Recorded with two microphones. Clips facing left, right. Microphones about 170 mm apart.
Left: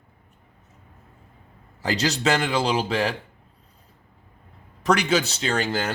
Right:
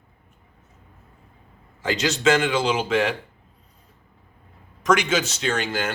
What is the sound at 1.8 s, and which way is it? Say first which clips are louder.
A man's voice: right 2 dB; 35° left (ahead or behind).